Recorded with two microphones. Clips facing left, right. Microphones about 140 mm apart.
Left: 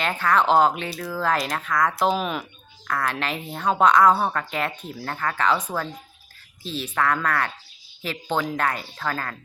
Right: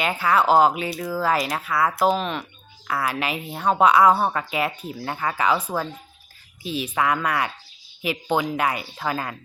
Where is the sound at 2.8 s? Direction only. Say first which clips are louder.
Right 1 dB; 10° right (ahead or behind).